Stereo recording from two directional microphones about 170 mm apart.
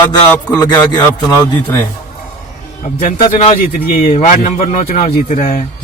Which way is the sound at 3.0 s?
50° left (ahead or behind).